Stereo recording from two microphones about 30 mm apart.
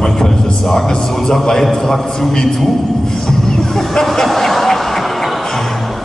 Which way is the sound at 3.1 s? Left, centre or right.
Centre.